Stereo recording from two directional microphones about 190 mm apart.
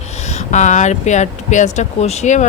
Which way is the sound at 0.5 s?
40° left (ahead or behind).